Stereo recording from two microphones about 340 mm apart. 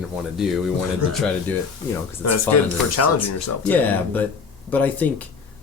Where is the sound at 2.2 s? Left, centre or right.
Left.